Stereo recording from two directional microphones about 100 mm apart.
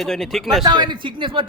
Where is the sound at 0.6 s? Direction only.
45° right (ahead or behind).